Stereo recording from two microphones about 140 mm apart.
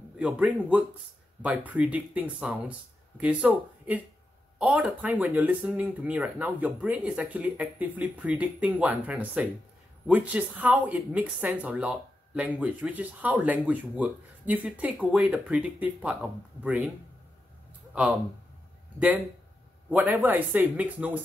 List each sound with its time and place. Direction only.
0.2 s speech: 10° right (ahead or behind)
19.9 s speech: 15° right (ahead or behind)